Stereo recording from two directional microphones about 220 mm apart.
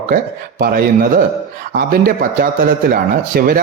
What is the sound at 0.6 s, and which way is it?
A man's voice, 45° right (ahead or behind).